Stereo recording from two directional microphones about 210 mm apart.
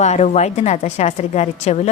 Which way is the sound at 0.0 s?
35° left (ahead or behind).